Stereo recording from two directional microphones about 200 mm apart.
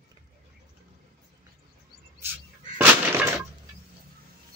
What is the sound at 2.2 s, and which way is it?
Bird, 10° right (ahead or behind).